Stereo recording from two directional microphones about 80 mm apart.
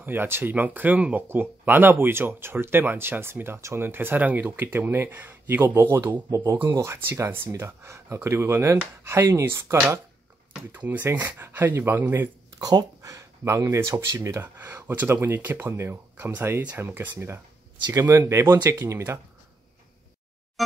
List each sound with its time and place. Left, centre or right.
0.0 s speech: right
6.3 s speech: right
10.7 s speech: right
12.5 s speech: right
13.4 s speech: right
18.2 s speech: right